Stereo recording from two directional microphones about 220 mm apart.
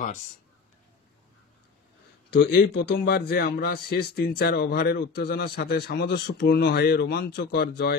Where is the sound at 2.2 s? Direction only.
45° left (ahead or behind).